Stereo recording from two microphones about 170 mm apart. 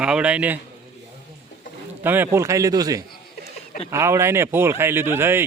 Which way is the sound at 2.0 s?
10° right (ahead or behind).